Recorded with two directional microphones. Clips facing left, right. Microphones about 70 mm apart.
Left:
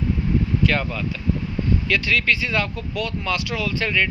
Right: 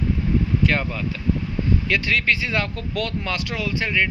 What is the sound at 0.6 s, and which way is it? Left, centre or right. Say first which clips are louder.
Speech: even; right.